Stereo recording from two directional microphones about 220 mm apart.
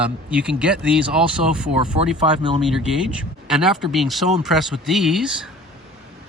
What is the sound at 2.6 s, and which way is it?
Speech, 5° right (ahead or behind).